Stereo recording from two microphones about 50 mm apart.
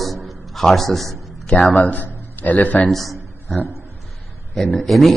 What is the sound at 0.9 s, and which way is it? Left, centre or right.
Speech, centre.